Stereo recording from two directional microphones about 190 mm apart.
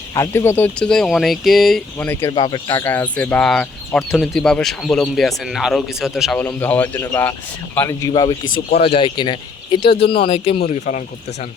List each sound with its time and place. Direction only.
0.1 s speech: 15° left (ahead or behind)
2.0 s speech: 20° left (ahead or behind); by 6.4 s centre (ahead or behind)
6.4 s speech: 10° left (ahead or behind)
8.7 s speech: 30° left (ahead or behind)